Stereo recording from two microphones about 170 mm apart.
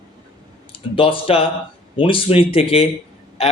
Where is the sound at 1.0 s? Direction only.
30° left (ahead or behind).